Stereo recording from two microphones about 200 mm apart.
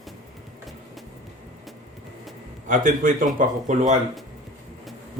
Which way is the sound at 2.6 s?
40° right (ahead or behind).